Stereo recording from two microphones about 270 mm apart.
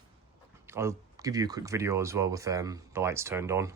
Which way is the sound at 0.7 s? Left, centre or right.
Centre.